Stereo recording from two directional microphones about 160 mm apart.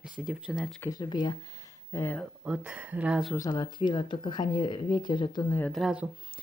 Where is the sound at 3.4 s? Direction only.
25° left (ahead or behind).